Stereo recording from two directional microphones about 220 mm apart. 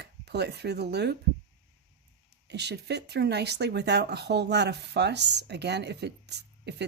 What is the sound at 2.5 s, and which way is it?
Speech, 50° right (ahead or behind).